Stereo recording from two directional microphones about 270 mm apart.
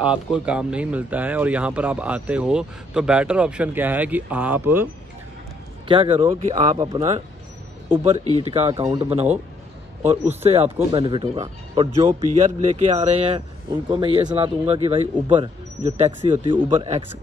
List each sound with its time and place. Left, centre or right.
0.0 s speech: centre
5.9 s speech: centre
9.1 s speech: right
10.4 s speech: right